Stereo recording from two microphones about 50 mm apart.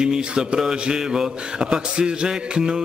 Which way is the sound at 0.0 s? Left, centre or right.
Centre.